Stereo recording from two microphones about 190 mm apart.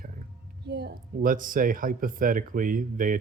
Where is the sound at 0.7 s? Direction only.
60° right (ahead or behind).